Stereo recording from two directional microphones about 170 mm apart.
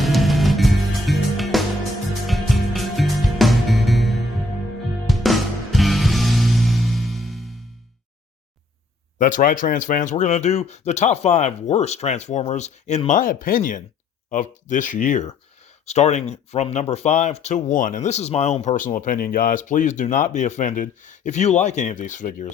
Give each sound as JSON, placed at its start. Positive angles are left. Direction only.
{"t": 0.0, "sound": "music", "side_deg": 0}
{"t": 9.1, "sound": "speech", "side_deg": 50}